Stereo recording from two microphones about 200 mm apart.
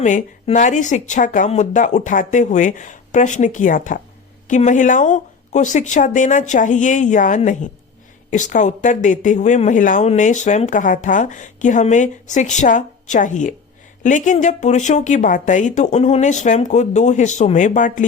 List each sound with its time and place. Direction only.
0.0 s speech: 40° left (ahead or behind)